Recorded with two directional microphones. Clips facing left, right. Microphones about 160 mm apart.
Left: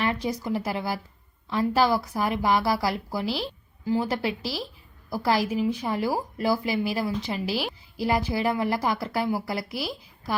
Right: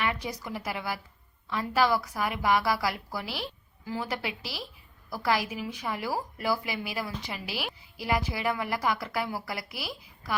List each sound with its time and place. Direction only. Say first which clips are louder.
0.0 s a woman's voice: left 5 dB; 30° left (ahead or behind)